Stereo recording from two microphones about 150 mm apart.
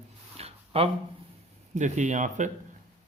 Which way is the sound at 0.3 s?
40° right (ahead or behind).